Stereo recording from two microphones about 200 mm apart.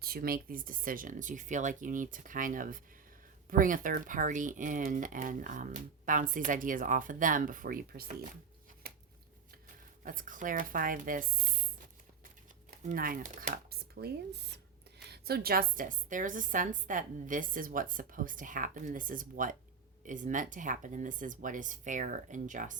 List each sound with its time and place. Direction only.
0.0 s speech: 50° right (ahead or behind)
10.0 s speech: 40° right (ahead or behind)
12.9 s speech: 45° right (ahead or behind)